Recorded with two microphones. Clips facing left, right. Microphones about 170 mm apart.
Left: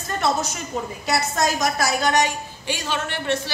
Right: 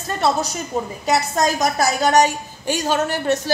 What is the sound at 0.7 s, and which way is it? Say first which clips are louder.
A woman's voice: right 4 dB; 40° right (ahead or behind).